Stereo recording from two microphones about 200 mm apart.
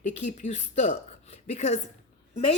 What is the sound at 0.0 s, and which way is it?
Speech, 35° left (ahead or behind).